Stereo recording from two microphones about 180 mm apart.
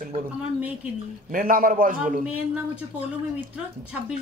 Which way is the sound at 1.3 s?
50° right (ahead or behind).